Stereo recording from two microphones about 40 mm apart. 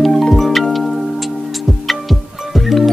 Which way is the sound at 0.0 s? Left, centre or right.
Centre.